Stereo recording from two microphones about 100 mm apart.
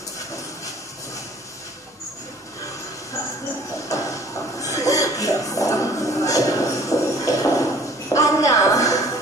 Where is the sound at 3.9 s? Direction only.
35° left (ahead or behind).